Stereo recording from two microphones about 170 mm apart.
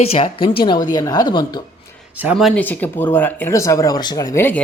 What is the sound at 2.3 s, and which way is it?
Speech, 5° left (ahead or behind).